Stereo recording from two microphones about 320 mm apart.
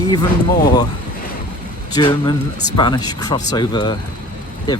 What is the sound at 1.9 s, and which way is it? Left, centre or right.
Speech, centre.